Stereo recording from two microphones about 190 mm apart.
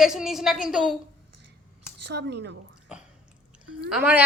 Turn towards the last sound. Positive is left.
turn(degrees=-5)  # may be behind; listen again after turning